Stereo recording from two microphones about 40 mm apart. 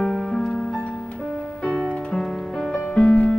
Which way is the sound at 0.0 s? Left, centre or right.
Centre.